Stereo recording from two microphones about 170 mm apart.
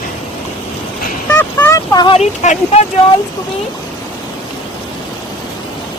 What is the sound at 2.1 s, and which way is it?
Speech, 40° left (ahead or behind).